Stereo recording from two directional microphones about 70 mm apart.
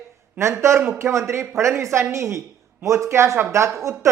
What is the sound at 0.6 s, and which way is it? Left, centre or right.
Speech, right.